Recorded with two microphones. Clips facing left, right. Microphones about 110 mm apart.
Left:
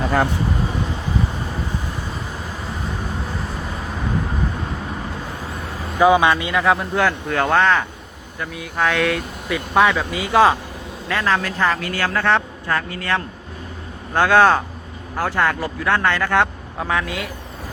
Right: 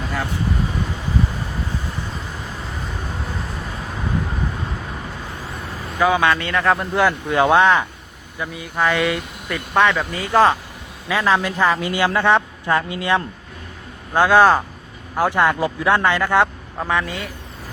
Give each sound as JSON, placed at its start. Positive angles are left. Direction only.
{"t": 6.0, "sound": "speech", "side_deg": 15}
{"t": 6.6, "sound": "speech", "side_deg": 0}
{"t": 8.4, "sound": "speech", "side_deg": 0}
{"t": 11.1, "sound": "speech", "side_deg": -10}
{"t": 14.1, "sound": "speech", "side_deg": -5}
{"t": 15.1, "sound": "speech", "side_deg": -15}